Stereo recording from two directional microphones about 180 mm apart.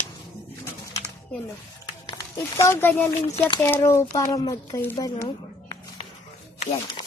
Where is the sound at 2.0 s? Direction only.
20° left (ahead or behind).